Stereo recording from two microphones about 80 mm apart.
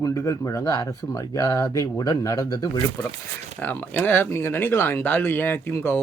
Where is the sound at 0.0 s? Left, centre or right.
Left.